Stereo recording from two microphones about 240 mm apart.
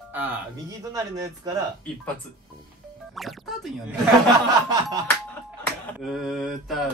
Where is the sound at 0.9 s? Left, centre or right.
Centre.